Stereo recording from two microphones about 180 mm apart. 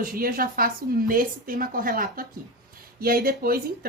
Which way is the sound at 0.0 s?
50° right (ahead or behind).